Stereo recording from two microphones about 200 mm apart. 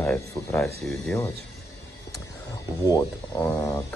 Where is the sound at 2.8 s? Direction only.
20° left (ahead or behind).